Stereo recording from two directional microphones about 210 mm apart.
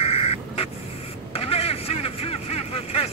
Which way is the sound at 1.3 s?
25° left (ahead or behind).